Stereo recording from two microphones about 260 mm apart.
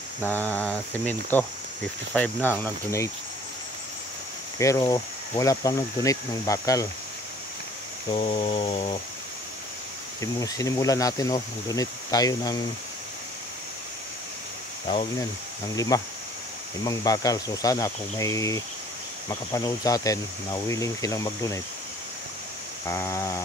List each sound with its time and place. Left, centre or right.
0.2 s speech: centre
4.6 s speech: centre
8.1 s a sound: left
10.2 s speech: centre
15.7 s speech: centre
22.8 s speech: centre